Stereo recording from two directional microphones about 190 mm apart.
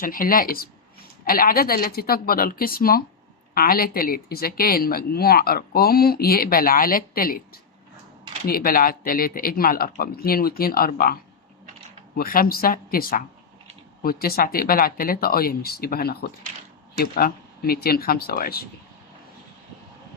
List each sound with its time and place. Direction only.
0.0 s a woman's voice: 45° left (ahead or behind)